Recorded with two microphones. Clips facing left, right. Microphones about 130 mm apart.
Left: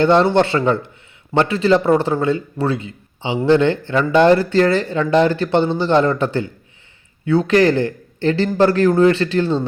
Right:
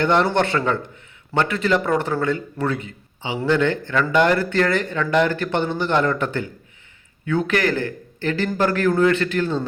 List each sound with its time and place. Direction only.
0.0 s a man's voice: 25° left (ahead or behind)